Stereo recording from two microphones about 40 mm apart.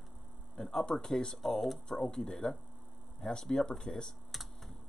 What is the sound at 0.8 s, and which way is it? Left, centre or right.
Speech, centre.